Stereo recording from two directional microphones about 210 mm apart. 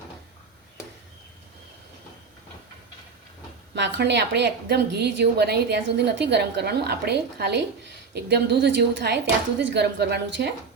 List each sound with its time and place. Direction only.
3.8 s a woman's voice: 55° right (ahead or behind)